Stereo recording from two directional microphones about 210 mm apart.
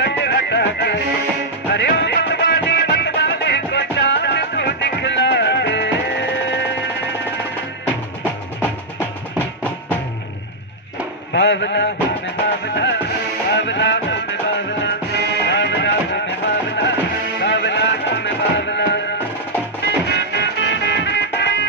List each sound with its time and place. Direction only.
0.0 s music: 55° left (ahead or behind)
7.8 s music: 10° right (ahead or behind)
11.3 s mantra: 55° left (ahead or behind)
12.6 s music: 55° left (ahead or behind)